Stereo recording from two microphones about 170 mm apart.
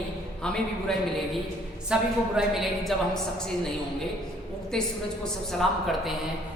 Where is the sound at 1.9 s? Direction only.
5° right (ahead or behind).